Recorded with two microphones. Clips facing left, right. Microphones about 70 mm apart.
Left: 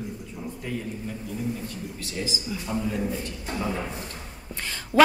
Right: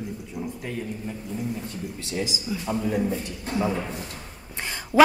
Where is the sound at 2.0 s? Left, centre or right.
Right.